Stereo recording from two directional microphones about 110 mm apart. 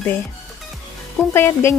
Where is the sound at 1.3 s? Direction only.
20° left (ahead or behind).